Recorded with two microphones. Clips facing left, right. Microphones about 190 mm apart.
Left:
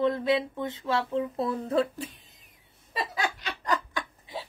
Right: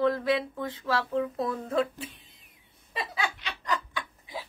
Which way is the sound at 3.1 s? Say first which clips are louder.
Left 2 dB; 40° left (ahead or behind).